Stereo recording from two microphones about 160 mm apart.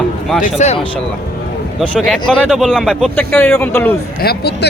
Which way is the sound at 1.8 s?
Centre (ahead or behind).